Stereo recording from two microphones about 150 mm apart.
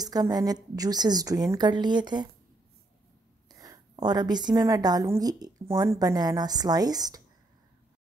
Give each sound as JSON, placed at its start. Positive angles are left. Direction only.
{"t": 0.0, "sound": "a woman's voice", "side_deg": -25}
{"t": 3.4, "sound": "a woman's voice", "side_deg": -25}